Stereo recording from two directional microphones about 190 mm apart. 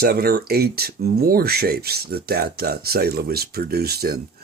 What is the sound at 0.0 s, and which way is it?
Speech, 55° right (ahead or behind).